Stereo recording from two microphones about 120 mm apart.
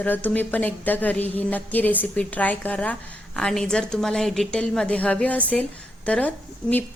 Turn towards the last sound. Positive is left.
turn(degrees=10)  # may be behind; listen again after turning